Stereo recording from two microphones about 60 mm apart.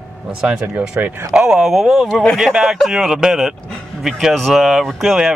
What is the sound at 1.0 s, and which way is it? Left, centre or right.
Speech, right.